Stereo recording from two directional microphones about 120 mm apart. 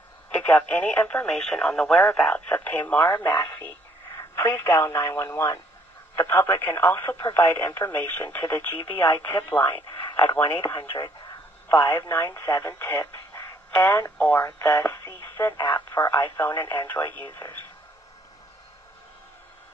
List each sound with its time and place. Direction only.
0.3 s speech: 15° left (ahead or behind)
10.5 s speech: 35° left (ahead or behind)
11.7 s speech: 25° left (ahead or behind)
17.4 s speech: 40° left (ahead or behind)